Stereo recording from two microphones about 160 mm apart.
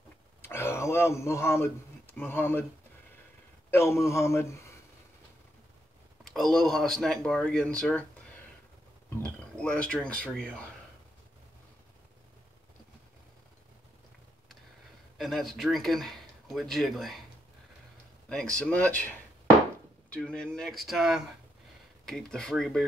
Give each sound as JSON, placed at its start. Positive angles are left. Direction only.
{"t": 0.4, "sound": "a sound", "side_deg": 15}
{"t": 3.7, "sound": "speech", "side_deg": 15}
{"t": 6.2, "sound": "speech", "side_deg": 0}
{"t": 9.2, "sound": "speech", "side_deg": 5}
{"t": 15.1, "sound": "speech", "side_deg": 0}
{"t": 18.3, "sound": "speech", "side_deg": 5}